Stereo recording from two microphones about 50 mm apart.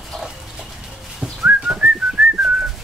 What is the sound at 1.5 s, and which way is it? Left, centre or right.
Whistling, right.